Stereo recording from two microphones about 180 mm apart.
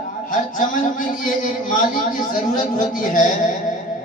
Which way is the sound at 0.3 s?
45° left (ahead or behind).